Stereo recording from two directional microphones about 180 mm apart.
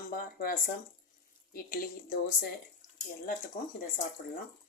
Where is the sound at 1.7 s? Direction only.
50° left (ahead or behind).